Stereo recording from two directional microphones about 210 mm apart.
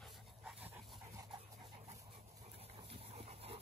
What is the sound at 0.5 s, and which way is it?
Dog, 10° right (ahead or behind).